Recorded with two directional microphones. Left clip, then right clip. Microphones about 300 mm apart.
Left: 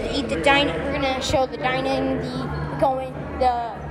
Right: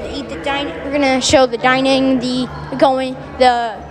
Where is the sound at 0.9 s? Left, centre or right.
Right.